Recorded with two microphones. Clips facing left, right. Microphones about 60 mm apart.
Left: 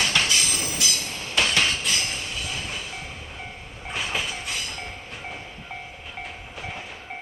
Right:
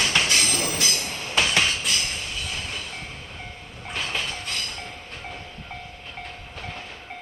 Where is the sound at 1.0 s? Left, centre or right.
Centre.